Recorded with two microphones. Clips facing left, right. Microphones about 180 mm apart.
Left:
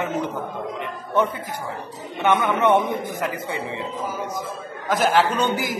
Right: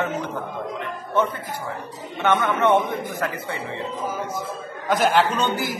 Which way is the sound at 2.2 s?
15° left (ahead or behind).